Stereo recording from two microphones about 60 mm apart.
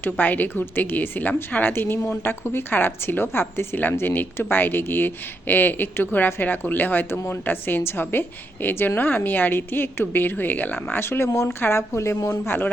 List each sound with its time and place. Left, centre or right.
0.0 s a woman's voice: left
11.6 s a woman's voice: left
12.5 s a woman's voice: left